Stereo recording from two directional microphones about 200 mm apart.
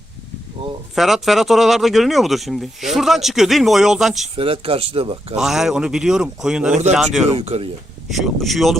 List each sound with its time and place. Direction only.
0.9 s speech: centre (ahead or behind)
4.4 s speech: 25° right (ahead or behind)
5.4 s speech: centre (ahead or behind)
7.3 s speech: 30° right (ahead or behind)
8.1 s speech: centre (ahead or behind)